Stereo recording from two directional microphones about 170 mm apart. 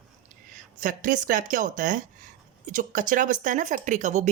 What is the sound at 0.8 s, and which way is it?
Speech, 50° right (ahead or behind).